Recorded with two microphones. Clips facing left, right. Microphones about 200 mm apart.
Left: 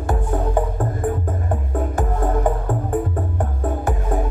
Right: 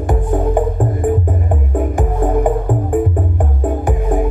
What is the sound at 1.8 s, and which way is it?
Music, 15° right (ahead or behind).